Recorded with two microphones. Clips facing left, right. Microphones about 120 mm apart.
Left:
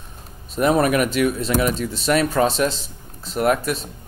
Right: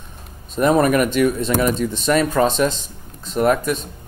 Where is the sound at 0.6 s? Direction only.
5° left (ahead or behind).